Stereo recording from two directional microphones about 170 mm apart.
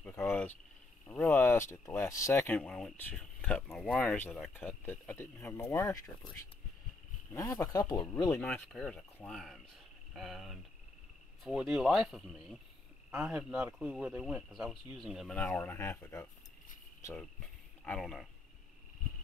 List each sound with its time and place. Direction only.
0.0 s speech: 5° left (ahead or behind)
7.3 s speech: 20° left (ahead or behind)
8.4 s speech: 5° left (ahead or behind)
17.8 s speech: 5° left (ahead or behind)